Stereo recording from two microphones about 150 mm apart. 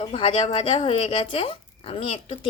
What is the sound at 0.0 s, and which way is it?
Speech, 35° left (ahead or behind).